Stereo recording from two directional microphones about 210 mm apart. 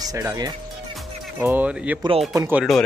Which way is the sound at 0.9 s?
10° right (ahead or behind).